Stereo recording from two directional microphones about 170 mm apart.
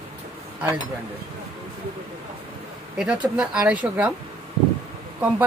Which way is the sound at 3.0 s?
5° right (ahead or behind).